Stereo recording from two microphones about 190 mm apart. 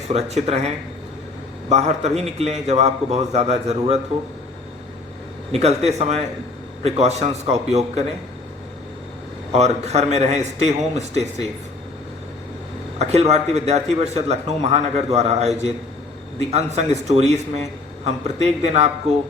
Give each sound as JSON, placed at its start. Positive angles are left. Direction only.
{"t": 0.1, "sound": "a man's voice", "side_deg": -35}
{"t": 1.7, "sound": "a man's voice", "side_deg": -35}
{"t": 5.5, "sound": "a man's voice", "side_deg": -35}
{"t": 9.5, "sound": "a man's voice", "side_deg": -35}
{"t": 13.0, "sound": "a man's voice", "side_deg": -35}